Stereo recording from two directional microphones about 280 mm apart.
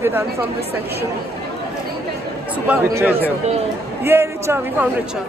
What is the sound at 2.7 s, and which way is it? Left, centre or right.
Speech, centre.